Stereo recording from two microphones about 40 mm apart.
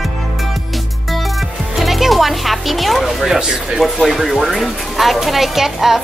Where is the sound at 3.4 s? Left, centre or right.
Centre.